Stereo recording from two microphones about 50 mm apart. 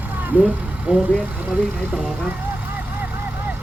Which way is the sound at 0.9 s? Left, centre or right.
Right.